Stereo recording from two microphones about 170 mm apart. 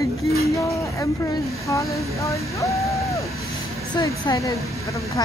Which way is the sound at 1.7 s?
20° left (ahead or behind).